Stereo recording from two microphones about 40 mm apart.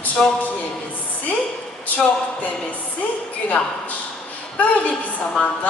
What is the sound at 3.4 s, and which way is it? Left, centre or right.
A woman's voice, left.